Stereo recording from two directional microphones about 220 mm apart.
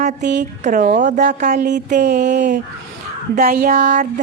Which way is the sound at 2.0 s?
50° right (ahead or behind).